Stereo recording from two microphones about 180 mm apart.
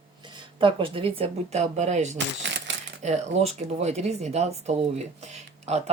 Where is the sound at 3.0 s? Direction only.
40° right (ahead or behind).